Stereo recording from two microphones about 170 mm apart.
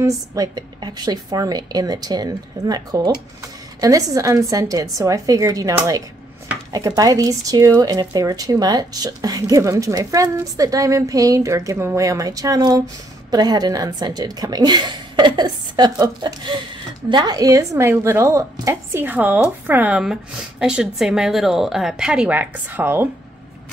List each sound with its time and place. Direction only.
0.0 s a woman's voice: 20° right (ahead or behind)